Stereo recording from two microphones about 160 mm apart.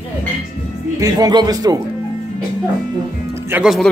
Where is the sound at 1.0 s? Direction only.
25° right (ahead or behind).